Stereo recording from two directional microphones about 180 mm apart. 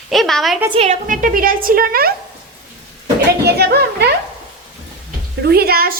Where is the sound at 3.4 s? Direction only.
65° right (ahead or behind).